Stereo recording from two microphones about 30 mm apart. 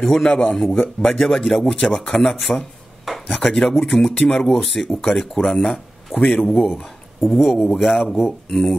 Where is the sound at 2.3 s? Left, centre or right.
Centre.